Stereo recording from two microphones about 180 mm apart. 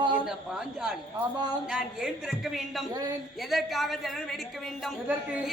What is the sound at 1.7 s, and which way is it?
Speech, centre (ahead or behind).